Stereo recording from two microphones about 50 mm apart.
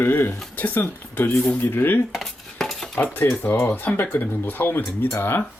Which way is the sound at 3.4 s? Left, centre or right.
Left.